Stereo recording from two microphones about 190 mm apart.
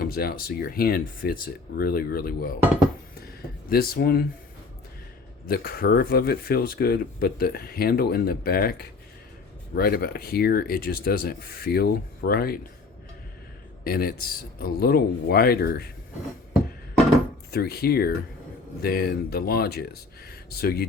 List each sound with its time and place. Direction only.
0.0 s speech: 55° left (ahead or behind)
3.7 s speech: 50° left (ahead or behind)
5.5 s speech: 50° left (ahead or behind)
13.8 s speech: 50° left (ahead or behind)
17.5 s speech: 55° left (ahead or behind)